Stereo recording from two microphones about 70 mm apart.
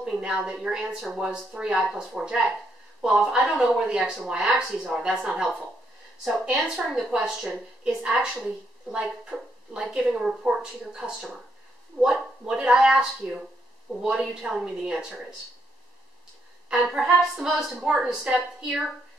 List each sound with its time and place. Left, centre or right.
0.0 s a woman's voice: centre
16.6 s speech: centre